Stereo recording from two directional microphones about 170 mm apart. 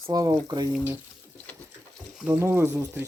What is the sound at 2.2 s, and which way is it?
Speech, 15° right (ahead or behind).